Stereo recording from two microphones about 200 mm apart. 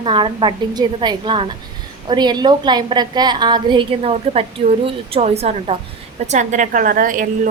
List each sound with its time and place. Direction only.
0.0 s a woman's voice: 25° right (ahead or behind); by 7.3 s 45° right (ahead or behind)